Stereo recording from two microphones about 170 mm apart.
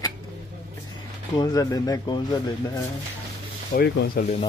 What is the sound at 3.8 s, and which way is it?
Speech, 70° left (ahead or behind).